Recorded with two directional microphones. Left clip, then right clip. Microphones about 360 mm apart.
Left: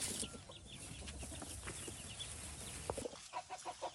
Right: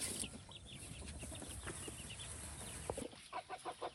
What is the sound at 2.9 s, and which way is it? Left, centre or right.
Chicken, centre.